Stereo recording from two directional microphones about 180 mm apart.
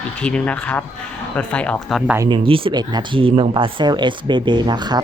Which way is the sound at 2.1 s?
20° right (ahead or behind).